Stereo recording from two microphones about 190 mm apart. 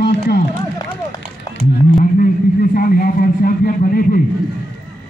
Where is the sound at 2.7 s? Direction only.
50° left (ahead or behind).